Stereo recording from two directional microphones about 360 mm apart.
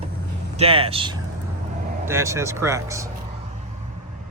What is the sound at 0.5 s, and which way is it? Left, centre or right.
Speech, centre.